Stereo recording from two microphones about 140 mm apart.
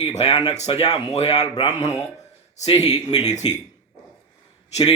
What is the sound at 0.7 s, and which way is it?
Speech, 40° left (ahead or behind).